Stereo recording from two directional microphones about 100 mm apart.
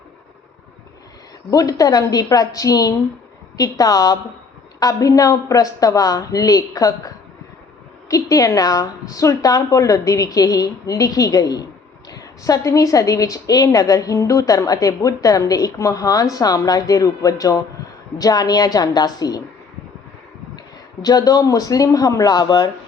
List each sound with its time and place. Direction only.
1.5 s a woman's voice: 35° left (ahead or behind)
21.0 s a woman's voice: 40° left (ahead or behind)